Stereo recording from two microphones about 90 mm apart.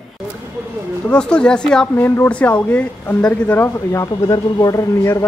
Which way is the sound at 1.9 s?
25° left (ahead or behind).